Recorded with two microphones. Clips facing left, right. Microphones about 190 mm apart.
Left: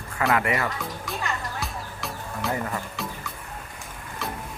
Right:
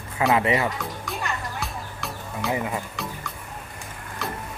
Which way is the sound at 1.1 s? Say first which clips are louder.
Even; centre (ahead or behind).